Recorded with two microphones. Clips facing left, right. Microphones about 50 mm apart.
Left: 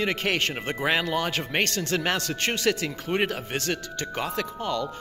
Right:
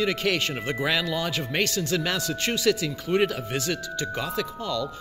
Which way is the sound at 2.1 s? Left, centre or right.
Left.